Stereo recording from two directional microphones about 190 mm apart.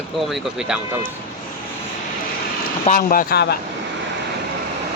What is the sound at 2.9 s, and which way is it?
Speech, 45° left (ahead or behind).